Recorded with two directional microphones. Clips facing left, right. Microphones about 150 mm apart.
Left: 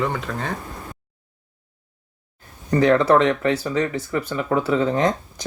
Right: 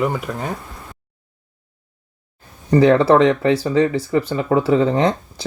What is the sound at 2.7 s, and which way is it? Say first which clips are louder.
Speech: right 3 dB; 30° right (ahead or behind).